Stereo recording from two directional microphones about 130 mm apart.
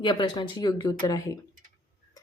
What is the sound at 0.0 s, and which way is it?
A woman's voice, 35° left (ahead or behind).